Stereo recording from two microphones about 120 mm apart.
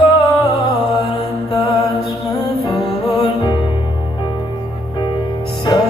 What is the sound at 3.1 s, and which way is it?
Music, 40° left (ahead or behind).